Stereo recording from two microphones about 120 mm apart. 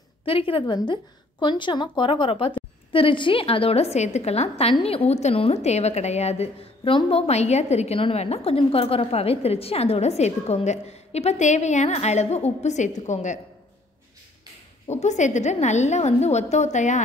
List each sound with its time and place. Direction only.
0.2 s a woman's voice: 50° left (ahead or behind); by 13.4 s 85° left
14.9 s a woman's voice: 75° left (ahead or behind)